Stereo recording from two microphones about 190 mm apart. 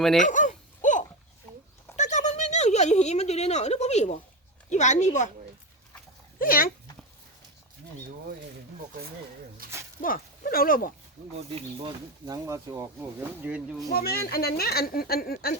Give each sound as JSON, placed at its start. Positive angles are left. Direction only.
{"t": 0.2, "sound": "a sound", "side_deg": 40}
{"t": 4.7, "sound": "speech", "side_deg": 40}
{"t": 6.4, "sound": "speech", "side_deg": 50}
{"t": 9.6, "sound": "snake", "side_deg": -50}
{"t": 10.0, "sound": "speech", "side_deg": 50}
{"t": 11.3, "sound": "speech", "side_deg": -30}
{"t": 13.9, "sound": "speech", "side_deg": 55}